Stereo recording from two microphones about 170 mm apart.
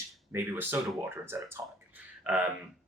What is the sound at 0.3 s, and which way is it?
Speech, 10° right (ahead or behind).